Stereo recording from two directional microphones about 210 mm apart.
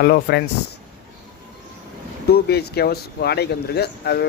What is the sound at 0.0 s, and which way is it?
Speech, 50° left (ahead or behind).